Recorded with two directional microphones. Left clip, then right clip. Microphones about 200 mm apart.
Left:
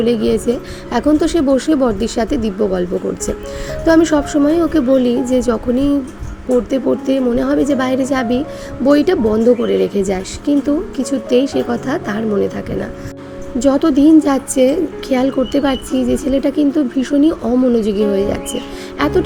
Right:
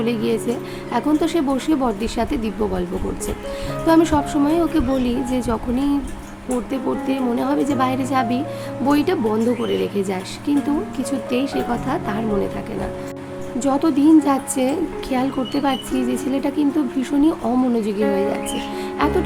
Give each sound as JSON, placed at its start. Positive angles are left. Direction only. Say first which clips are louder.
{"t": 0.0, "sound": "speech", "louder": "left 6 dB", "side_deg": 20}
{"t": 3.8, "sound": "a woman's voice", "louder": "left 4 dB", "side_deg": 20}
{"t": 13.6, "sound": "a woman's voice", "louder": "left 6 dB", "side_deg": 20}